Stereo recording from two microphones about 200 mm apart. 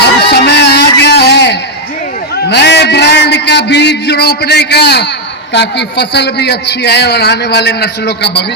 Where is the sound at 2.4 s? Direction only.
60° left (ahead or behind).